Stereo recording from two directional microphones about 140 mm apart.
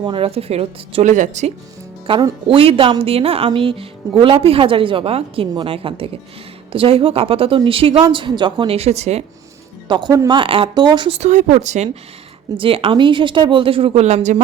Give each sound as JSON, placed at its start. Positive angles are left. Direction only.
{"t": 0.0, "sound": "a woman's voice", "side_deg": -40}
{"t": 1.0, "sound": "speech", "side_deg": -60}
{"t": 2.0, "sound": "a woman's voice", "side_deg": -35}
{"t": 9.9, "sound": "a woman's voice", "side_deg": -30}
{"t": 11.2, "sound": "speech", "side_deg": -55}
{"t": 12.5, "sound": "a woman's voice", "side_deg": -40}